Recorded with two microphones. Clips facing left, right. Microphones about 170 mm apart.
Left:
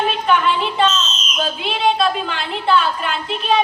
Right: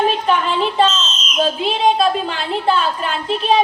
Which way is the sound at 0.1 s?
40° right (ahead or behind).